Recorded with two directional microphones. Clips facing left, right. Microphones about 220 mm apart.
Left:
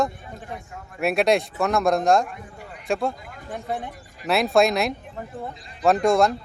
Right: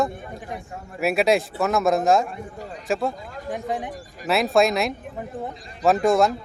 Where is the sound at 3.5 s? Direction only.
15° right (ahead or behind).